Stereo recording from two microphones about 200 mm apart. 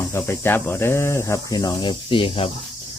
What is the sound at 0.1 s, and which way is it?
Speech, 10° left (ahead or behind).